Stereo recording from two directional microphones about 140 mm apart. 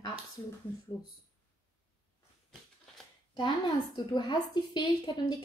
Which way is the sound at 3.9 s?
30° left (ahead or behind).